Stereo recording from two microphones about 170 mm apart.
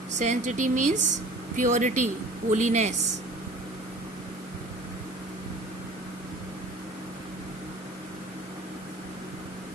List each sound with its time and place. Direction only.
0.2 s speech: 45° right (ahead or behind)